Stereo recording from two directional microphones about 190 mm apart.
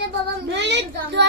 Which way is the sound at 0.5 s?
65° right (ahead or behind).